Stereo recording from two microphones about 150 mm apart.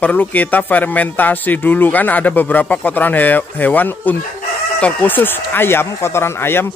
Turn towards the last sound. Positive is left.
turn(degrees=15)  # may be behind; listen again after turning